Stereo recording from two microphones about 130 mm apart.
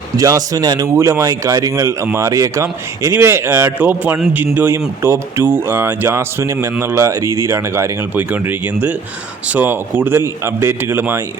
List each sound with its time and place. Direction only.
0.2 s a man's voice: 30° right (ahead or behind)